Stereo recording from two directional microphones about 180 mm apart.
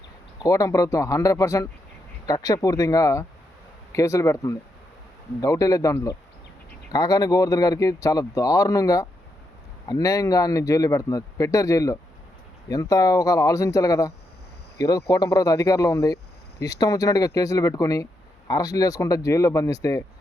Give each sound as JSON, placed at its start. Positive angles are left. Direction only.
{"t": 0.4, "sound": "speech", "side_deg": 20}